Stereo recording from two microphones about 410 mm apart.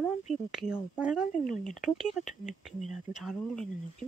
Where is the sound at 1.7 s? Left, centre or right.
Centre.